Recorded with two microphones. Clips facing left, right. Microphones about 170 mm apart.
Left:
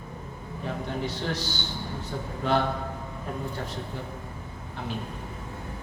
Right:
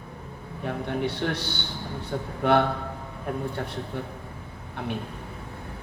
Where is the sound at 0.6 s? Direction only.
60° right (ahead or behind).